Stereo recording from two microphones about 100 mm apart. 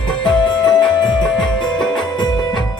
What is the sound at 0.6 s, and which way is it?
Music, 5° left (ahead or behind).